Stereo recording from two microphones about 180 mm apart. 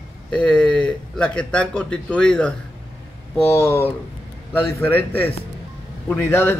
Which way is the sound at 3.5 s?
15° left (ahead or behind).